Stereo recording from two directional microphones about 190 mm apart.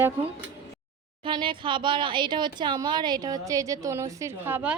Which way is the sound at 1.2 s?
25° right (ahead or behind).